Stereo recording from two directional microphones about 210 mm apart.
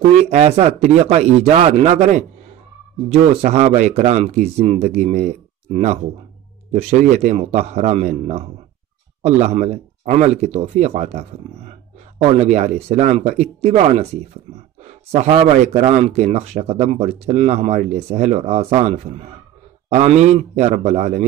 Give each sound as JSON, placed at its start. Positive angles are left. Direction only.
{"t": 0.1, "sound": "speech", "side_deg": -30}